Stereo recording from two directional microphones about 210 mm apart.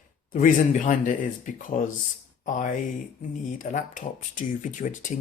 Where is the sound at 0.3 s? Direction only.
40° left (ahead or behind).